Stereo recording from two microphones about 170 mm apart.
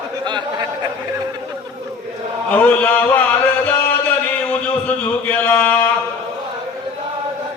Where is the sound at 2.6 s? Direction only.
10° left (ahead or behind).